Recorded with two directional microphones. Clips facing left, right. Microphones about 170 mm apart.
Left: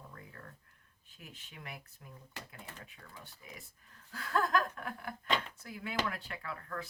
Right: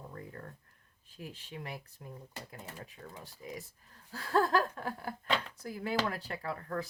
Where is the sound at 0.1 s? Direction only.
35° right (ahead or behind).